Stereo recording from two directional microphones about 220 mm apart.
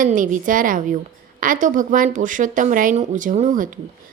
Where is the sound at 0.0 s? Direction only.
35° right (ahead or behind).